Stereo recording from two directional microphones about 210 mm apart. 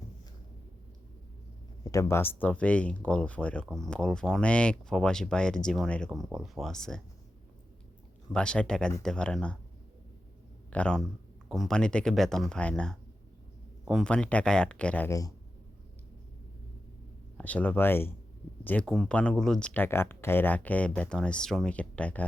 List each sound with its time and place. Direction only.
1.8 s speech: 15° left (ahead or behind)
8.3 s speech: 5° left (ahead or behind)
10.7 s a man's voice: 5° left (ahead or behind)
17.3 s speech: 5° left (ahead or behind)